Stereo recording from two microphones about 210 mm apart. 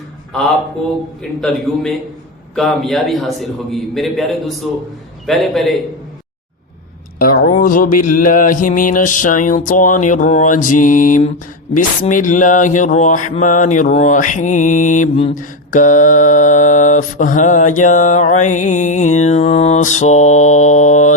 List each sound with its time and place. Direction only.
2.6 s a man's voice: centre (ahead or behind)
7.2 s mantra: 40° left (ahead or behind)
15.4 s mantra: 40° left (ahead or behind)